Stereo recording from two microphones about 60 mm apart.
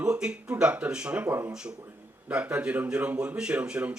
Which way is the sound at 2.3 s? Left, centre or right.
Right.